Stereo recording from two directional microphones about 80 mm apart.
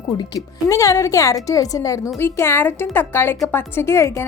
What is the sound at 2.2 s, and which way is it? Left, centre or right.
A woman's voice, left.